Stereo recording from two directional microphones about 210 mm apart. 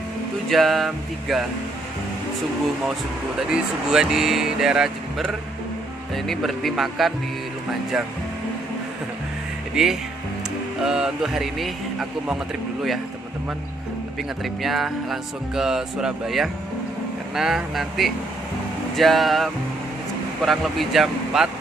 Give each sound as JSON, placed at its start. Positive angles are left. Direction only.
{"t": 0.5, "sound": "speech", "side_deg": 0}
{"t": 3.9, "sound": "speech", "side_deg": 0}
{"t": 9.8, "sound": "speech", "side_deg": -5}
{"t": 14.4, "sound": "speech", "side_deg": 0}